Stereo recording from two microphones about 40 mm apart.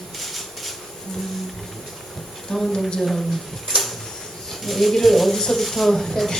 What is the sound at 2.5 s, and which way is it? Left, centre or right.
Speech, centre.